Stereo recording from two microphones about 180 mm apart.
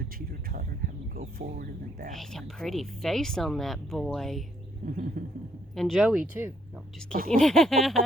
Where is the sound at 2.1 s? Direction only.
Centre (ahead or behind).